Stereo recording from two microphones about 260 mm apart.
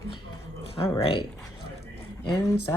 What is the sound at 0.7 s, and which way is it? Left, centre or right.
Speech, left.